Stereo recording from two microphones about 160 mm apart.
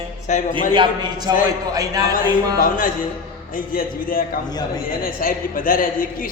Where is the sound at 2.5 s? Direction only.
60° left (ahead or behind).